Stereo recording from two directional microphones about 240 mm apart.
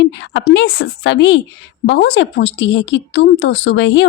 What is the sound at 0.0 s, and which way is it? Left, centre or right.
A woman's voice, left.